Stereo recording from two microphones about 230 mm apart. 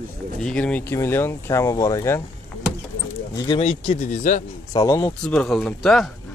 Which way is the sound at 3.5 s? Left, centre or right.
Left.